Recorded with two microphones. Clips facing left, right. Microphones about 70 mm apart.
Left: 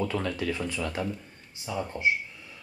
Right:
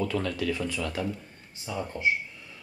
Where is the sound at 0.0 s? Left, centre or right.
Left.